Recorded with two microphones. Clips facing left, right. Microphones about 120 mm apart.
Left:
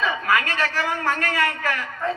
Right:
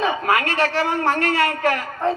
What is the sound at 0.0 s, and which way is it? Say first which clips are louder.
A man's voice: right 3 dB; 30° right (ahead or behind).